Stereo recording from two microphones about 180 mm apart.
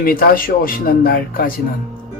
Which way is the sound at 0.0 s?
55° left (ahead or behind).